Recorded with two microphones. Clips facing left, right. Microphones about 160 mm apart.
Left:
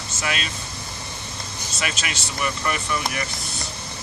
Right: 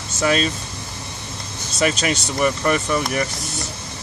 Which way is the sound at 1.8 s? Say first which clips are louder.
Right 10 dB; 35° right (ahead or behind).